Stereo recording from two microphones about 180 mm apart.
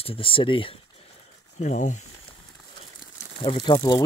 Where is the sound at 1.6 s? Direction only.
45° left (ahead or behind).